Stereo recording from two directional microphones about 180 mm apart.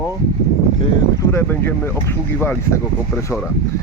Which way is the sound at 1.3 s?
10° left (ahead or behind).